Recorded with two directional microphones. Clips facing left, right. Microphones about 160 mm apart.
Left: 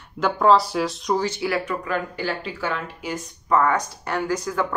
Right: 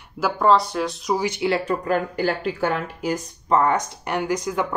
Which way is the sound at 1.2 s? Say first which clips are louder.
Right 2 dB; 20° right (ahead or behind).